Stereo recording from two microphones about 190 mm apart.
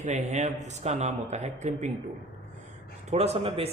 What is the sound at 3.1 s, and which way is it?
Speech, 35° right (ahead or behind).